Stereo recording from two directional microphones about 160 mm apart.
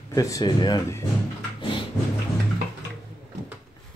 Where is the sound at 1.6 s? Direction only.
30° left (ahead or behind).